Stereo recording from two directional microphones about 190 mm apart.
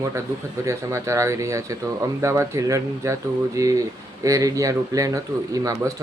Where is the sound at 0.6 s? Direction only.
15° right (ahead or behind).